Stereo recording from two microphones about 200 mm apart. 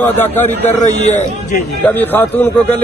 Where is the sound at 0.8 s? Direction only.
35° left (ahead or behind).